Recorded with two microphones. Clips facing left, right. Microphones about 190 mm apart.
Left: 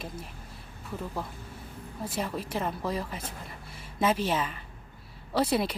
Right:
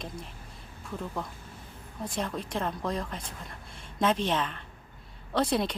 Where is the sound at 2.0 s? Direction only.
5° left (ahead or behind).